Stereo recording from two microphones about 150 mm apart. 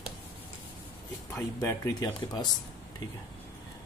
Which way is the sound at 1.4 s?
20° left (ahead or behind).